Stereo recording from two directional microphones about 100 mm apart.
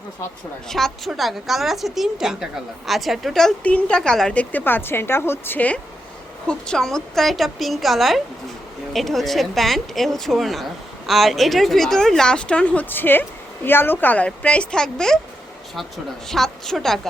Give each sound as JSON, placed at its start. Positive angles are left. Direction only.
{"t": 0.7, "sound": "speech", "side_deg": 5}
{"t": 3.6, "sound": "a woman's voice", "side_deg": 15}
{"t": 4.5, "sound": "a woman's voice", "side_deg": 20}
{"t": 16.3, "sound": "speech", "side_deg": 5}